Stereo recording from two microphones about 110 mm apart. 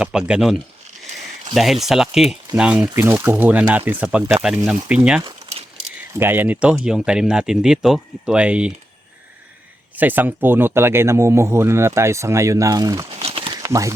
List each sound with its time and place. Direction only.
0.0 s speech: 10° right (ahead or behind)
2.8 s speech: 20° right (ahead or behind)
6.1 s speech: 20° right (ahead or behind)
9.9 s speech: 15° right (ahead or behind); by 13.1 s 35° right (ahead or behind)
13.2 s a sound: 55° right (ahead or behind)
13.6 s speech: 30° right (ahead or behind)